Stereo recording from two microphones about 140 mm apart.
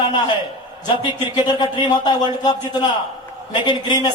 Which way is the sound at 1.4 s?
30° left (ahead or behind).